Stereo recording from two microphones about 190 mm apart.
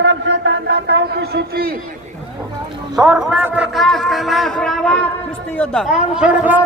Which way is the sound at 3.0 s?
5° right (ahead or behind).